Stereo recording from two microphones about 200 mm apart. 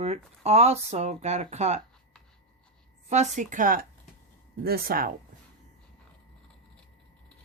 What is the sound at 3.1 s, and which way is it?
Speech, 35° right (ahead or behind).